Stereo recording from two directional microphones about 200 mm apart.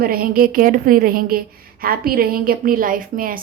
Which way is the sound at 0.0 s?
50° right (ahead or behind).